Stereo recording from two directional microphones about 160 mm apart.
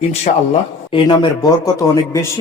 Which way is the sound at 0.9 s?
30° left (ahead or behind).